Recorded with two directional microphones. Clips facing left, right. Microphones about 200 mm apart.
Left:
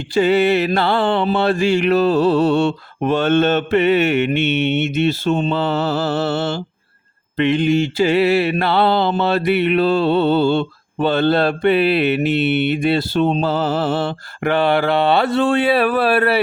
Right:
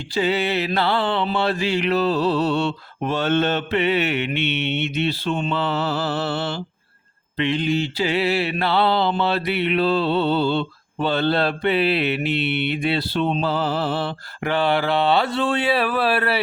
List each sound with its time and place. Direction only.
0.1 s mantra: 50° left (ahead or behind)